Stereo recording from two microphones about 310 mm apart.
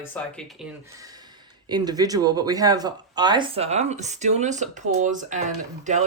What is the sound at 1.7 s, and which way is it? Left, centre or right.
Speech, centre.